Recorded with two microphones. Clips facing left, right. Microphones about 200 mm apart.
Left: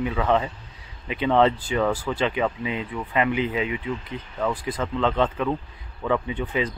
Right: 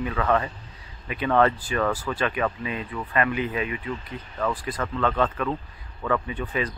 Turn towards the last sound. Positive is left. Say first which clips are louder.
# left 2 dB
turn(degrees=20)  # may be behind; listen again after turning